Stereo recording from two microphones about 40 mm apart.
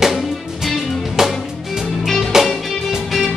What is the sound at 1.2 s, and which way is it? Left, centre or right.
Music, centre.